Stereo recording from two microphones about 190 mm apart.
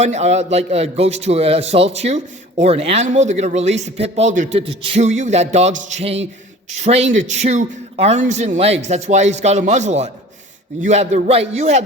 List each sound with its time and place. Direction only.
0.0 s a man's voice: 35° right (ahead or behind)